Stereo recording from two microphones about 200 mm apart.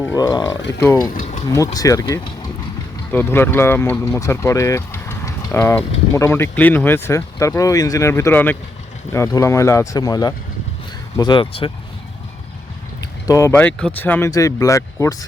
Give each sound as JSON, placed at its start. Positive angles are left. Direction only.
{"t": 0.0, "sound": "speech", "side_deg": 15}
{"t": 1.1, "sound": "boiling", "side_deg": 40}
{"t": 1.5, "sound": "speech", "side_deg": 15}
{"t": 13.2, "sound": "speech", "side_deg": 15}